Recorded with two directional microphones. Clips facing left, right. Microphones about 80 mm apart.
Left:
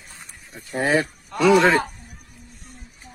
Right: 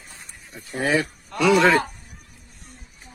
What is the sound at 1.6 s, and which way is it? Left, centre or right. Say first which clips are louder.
Speech: even; left.